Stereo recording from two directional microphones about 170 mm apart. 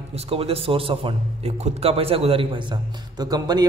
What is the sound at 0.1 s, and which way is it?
A man's voice, 35° right (ahead or behind).